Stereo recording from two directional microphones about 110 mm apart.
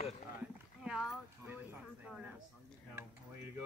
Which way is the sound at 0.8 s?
5° right (ahead or behind).